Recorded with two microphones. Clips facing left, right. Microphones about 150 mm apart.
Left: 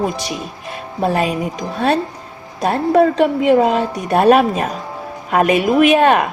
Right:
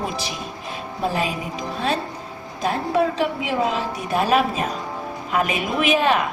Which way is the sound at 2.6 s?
55° left (ahead or behind).